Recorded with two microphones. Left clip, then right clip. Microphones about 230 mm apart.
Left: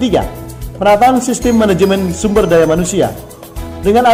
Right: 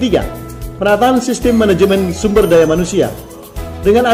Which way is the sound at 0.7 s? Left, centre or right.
Centre.